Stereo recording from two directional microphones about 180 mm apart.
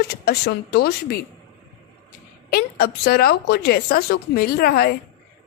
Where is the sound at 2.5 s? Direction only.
60° left (ahead or behind).